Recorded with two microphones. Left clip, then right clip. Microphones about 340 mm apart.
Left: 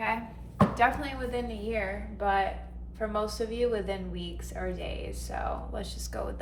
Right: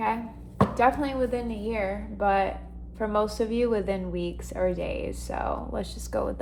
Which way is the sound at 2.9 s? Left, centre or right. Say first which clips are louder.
Right 5 dB; right.